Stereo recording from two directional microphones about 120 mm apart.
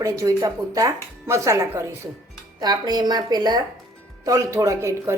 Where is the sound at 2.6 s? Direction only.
35° right (ahead or behind).